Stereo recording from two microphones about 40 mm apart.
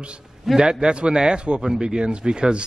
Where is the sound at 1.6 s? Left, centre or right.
Centre.